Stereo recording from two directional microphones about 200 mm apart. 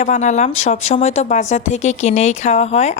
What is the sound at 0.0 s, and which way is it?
A woman's voice, 35° left (ahead or behind).